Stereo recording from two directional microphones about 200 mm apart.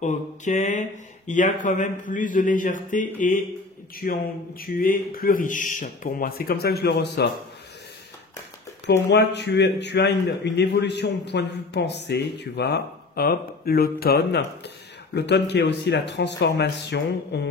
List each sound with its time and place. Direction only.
0.0 s speech: 35° left (ahead or behind); by 7.2 s 55° left (ahead or behind)
9.1 s a man's voice: 60° left (ahead or behind)